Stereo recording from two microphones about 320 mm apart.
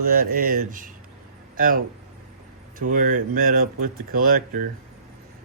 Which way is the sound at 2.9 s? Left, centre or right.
Right.